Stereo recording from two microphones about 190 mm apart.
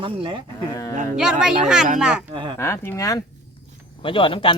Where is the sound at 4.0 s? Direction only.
25° left (ahead or behind).